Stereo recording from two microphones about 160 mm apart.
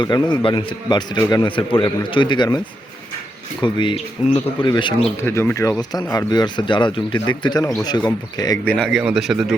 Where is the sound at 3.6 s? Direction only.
30° left (ahead or behind).